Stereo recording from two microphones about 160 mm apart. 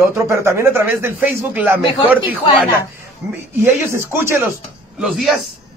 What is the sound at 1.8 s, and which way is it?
Speech, 30° left (ahead or behind).